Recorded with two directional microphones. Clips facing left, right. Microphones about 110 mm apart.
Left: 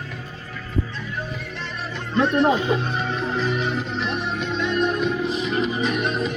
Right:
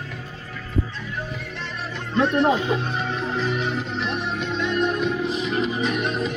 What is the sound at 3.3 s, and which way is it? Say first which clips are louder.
Music: left 1 dB; 60° left (ahead or behind).